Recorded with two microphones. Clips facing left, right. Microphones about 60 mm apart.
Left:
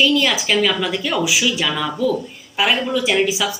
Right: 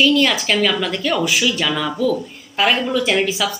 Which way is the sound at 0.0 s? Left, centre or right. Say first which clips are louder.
Right 1 dB; centre.